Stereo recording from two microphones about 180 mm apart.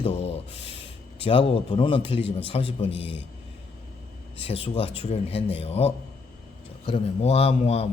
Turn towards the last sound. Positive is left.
turn(degrees=35)  # may be behind; listen again after turning